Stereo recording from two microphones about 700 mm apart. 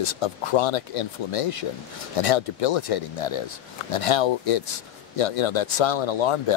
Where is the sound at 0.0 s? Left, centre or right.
Left.